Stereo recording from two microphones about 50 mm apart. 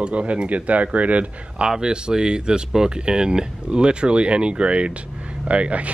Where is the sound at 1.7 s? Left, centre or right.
Centre.